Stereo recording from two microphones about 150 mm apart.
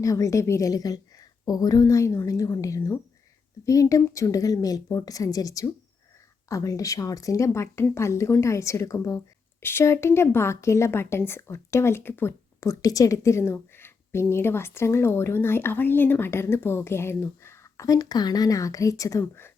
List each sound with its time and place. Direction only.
0.0 s a woman's voice: 20° left (ahead or behind)